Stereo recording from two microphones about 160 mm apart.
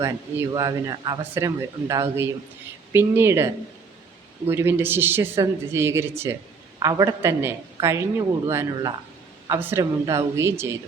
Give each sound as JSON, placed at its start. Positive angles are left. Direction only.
{"t": 0.0, "sound": "a woman's voice", "side_deg": -20}